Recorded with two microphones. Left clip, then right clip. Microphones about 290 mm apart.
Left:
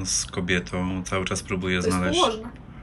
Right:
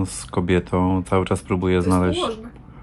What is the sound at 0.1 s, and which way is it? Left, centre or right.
Speech, centre.